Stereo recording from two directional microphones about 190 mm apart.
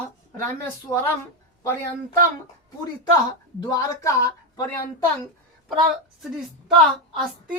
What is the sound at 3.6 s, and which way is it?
Speech, 15° left (ahead or behind).